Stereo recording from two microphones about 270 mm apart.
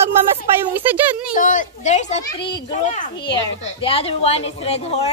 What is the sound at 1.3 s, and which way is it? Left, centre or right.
A woman's voice, left.